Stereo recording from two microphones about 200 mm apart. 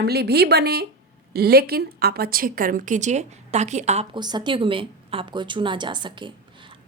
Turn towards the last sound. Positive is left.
turn(degrees=-25)  # may be behind; listen again after turning